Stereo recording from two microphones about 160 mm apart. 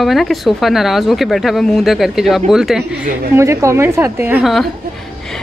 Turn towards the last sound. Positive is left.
turn(degrees=-10)  # may be behind; listen again after turning